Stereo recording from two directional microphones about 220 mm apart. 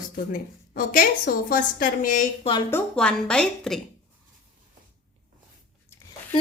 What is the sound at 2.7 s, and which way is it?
A woman's voice, 5° left (ahead or behind).